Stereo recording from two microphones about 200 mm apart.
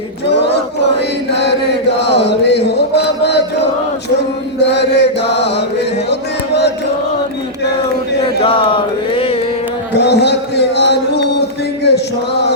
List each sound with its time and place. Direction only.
2.0 s music: 60° left (ahead or behind)
4.6 s chant: 60° left (ahead or behind)
6.1 s music: 60° left (ahead or behind)
8.4 s mantra: 25° left (ahead or behind)
9.9 s a sound: 55° left (ahead or behind)
12.3 s chant: 60° left (ahead or behind)